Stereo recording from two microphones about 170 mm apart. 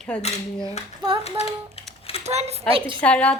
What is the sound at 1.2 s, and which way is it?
Typing, 35° left (ahead or behind).